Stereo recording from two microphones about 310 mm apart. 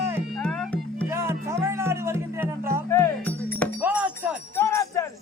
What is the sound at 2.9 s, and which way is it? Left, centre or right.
Music, centre.